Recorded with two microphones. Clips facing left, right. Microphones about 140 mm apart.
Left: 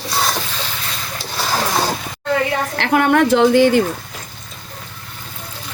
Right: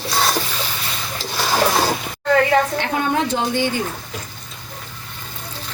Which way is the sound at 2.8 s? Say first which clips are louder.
Left 6 dB; 70° left (ahead or behind).